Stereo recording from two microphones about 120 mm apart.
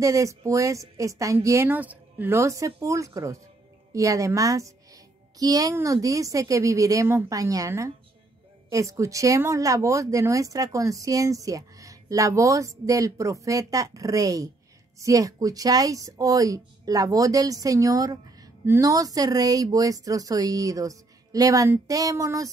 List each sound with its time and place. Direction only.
0.0 s speech: 25° right (ahead or behind)